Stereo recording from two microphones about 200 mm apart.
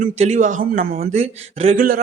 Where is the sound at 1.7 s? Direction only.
45° right (ahead or behind).